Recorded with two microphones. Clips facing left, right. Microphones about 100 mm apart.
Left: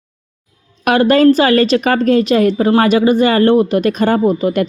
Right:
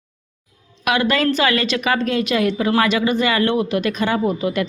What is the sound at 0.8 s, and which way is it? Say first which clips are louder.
A woman's voice: left 8 dB; 45° left (ahead or behind).